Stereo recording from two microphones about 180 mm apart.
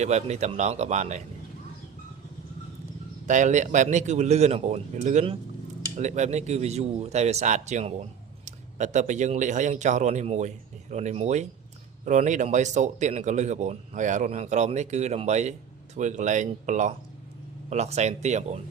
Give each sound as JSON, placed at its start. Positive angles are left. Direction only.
{"t": 0.0, "sound": "a man's voice", "side_deg": -40}
{"t": 3.2, "sound": "a man's voice", "side_deg": -40}